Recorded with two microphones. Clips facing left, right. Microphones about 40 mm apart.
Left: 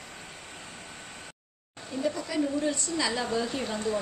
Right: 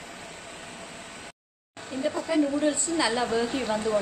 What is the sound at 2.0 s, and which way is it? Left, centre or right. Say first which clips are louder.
A woman's voice: right 4 dB; right.